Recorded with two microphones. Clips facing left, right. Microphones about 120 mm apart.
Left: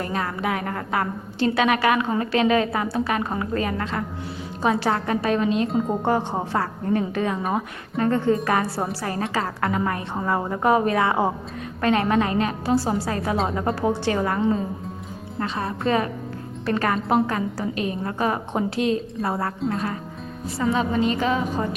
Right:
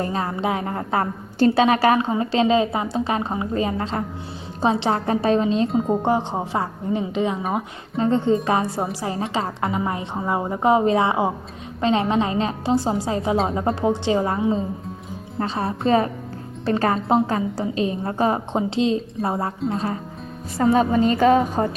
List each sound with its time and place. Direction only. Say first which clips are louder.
0.0 s a woman's voice: right 2 dB; 30° right (ahead or behind)
6.0 s a woman's voice: right 1 dB; 20° right (ahead or behind)
15.4 s a woman's voice: right 3 dB; 35° right (ahead or behind)
20.6 s a woman's voice: right 5 dB; 45° right (ahead or behind)